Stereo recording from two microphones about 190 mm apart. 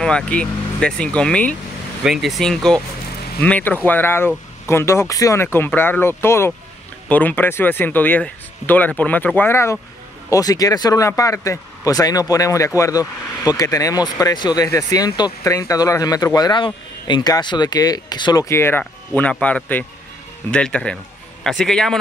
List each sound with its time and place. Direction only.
0.0 s speech: 5° left (ahead or behind)